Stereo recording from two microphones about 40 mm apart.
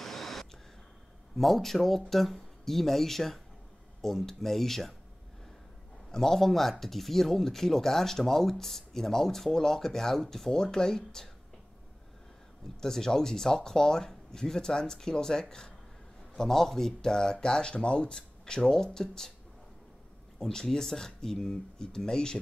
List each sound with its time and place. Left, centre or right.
0.0 s a sound: centre
1.3 s speech: centre
6.1 s speech: centre
12.8 s speech: centre
20.3 s speech: centre